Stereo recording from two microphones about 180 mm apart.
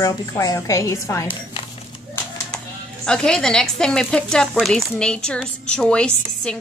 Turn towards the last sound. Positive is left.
turn(degrees=5)  # may be behind; listen again after turning